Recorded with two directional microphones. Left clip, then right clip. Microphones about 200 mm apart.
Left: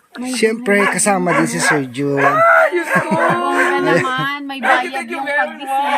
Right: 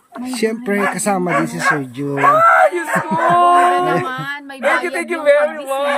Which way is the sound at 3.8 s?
10° right (ahead or behind).